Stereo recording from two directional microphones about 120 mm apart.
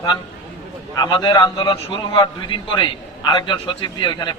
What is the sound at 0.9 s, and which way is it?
A man's voice, 35° left (ahead or behind).